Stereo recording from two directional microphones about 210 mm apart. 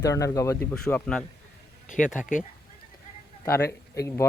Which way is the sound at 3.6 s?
15° left (ahead or behind).